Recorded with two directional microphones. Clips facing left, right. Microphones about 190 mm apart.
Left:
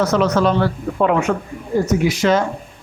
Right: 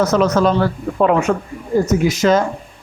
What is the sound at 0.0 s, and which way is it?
Speech, 45° right (ahead or behind).